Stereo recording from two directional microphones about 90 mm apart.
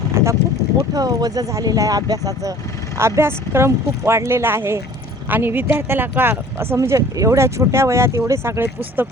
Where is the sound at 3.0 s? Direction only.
30° right (ahead or behind).